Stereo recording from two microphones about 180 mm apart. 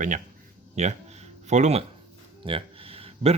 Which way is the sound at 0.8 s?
40° right (ahead or behind).